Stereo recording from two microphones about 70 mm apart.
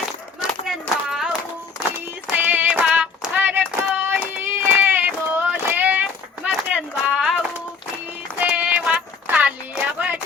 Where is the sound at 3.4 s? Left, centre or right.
Right.